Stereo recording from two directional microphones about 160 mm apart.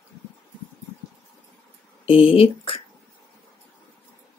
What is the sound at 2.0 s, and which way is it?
Speech, 35° left (ahead or behind).